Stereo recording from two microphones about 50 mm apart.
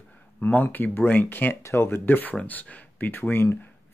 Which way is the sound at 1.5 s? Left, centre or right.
Left.